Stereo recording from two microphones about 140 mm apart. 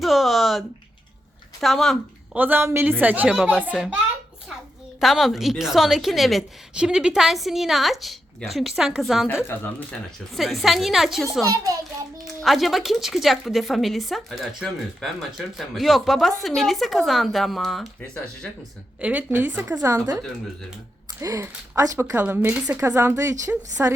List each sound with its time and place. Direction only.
0.0 s speech: centre (ahead or behind)
1.6 s a woman's voice: centre (ahead or behind)
2.3 s a woman's voice: 15° right (ahead or behind)
3.3 s a woman's voice: centre (ahead or behind)
4.9 s a woman's voice: centre (ahead or behind)
11.5 s speech: 25° right (ahead or behind)
12.2 s a woman's voice: centre (ahead or behind)
18.9 s a woman's voice: 10° right (ahead or behind)
19.8 s a woman's voice: 25° right (ahead or behind)